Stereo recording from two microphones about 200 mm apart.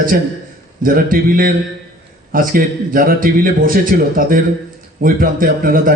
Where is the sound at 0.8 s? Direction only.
45° right (ahead or behind).